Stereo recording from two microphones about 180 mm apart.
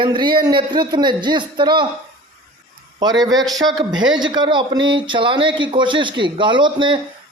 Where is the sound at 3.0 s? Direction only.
20° right (ahead or behind).